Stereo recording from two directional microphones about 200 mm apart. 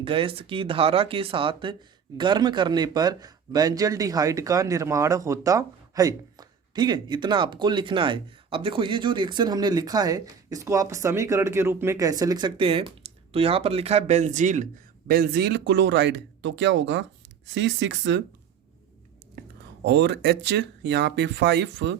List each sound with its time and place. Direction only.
0.0 s a man's voice: 25° right (ahead or behind); by 18.2 s 65° right (ahead or behind)
19.4 s whispering: 45° right (ahead or behind)
19.8 s a man's voice: 60° right (ahead or behind)